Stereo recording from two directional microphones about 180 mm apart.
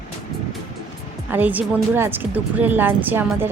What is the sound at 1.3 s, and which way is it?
A woman's voice, 10° right (ahead or behind).